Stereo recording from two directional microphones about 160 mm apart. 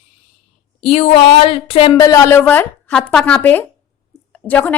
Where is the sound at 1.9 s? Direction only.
20° left (ahead or behind).